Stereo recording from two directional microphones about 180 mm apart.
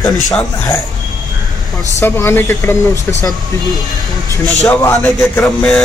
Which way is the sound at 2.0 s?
15° left (ahead or behind).